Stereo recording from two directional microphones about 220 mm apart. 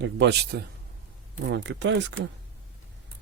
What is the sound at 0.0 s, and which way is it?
Speech, 55° right (ahead or behind).